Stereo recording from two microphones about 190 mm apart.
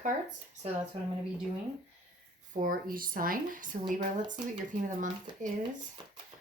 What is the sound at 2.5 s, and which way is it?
Speech, 45° right (ahead or behind).